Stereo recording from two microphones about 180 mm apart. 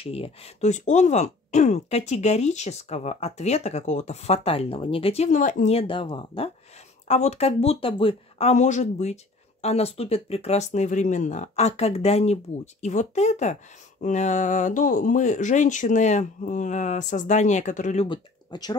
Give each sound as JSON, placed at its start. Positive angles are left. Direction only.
{"t": 0.0, "sound": "speech", "side_deg": 30}
{"t": 18.0, "sound": "speech", "side_deg": 25}